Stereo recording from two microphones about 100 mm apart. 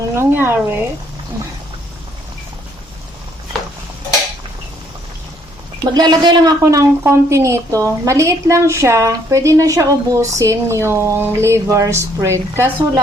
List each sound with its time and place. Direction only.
0.2 s a woman's voice: 20° right (ahead or behind)
5.8 s a woman's voice: 45° right (ahead or behind)
6.6 s a woman's voice: 30° right (ahead or behind)